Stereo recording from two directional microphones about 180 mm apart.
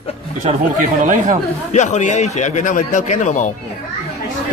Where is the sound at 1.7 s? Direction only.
40° left (ahead or behind).